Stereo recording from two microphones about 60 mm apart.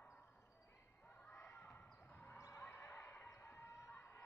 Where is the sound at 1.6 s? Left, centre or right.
Left.